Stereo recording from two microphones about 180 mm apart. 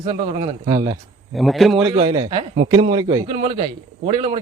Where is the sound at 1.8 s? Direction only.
20° right (ahead or behind).